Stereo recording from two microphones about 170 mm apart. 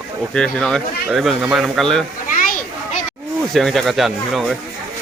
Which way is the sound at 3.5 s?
Centre (ahead or behind).